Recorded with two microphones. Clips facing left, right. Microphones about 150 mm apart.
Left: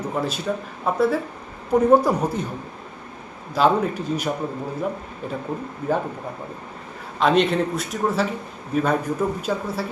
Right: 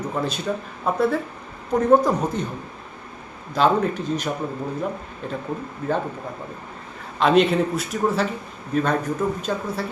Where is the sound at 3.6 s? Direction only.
5° left (ahead or behind).